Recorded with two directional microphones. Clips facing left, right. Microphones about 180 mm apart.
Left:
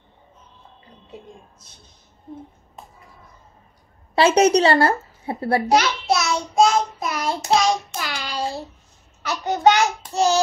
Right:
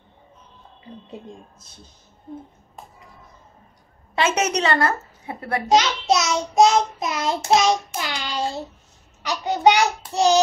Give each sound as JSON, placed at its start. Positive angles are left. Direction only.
{"t": 4.1, "sound": "a woman's voice", "side_deg": 35}
{"t": 5.7, "sound": "child singing", "side_deg": -20}
{"t": 9.2, "sound": "a child's voice", "side_deg": -15}